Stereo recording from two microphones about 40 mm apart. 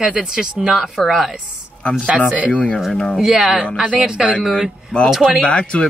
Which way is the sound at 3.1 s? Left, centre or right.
Centre.